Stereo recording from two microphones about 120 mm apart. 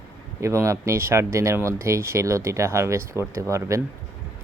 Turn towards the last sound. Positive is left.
turn(degrees=-25)  # may be behind; listen again after turning